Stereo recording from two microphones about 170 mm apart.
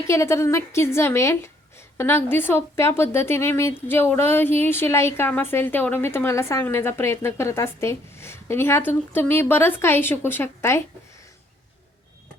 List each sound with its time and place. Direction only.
0.1 s speech: 15° left (ahead or behind)